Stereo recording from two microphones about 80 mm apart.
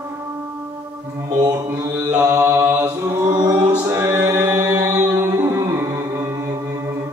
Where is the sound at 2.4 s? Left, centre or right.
Right.